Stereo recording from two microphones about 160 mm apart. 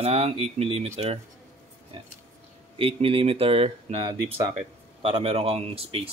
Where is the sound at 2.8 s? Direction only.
35° right (ahead or behind).